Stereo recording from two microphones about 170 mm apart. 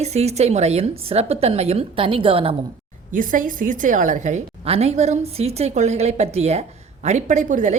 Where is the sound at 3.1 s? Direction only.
50° right (ahead or behind).